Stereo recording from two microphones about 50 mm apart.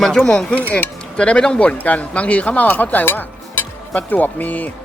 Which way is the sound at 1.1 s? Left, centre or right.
Left.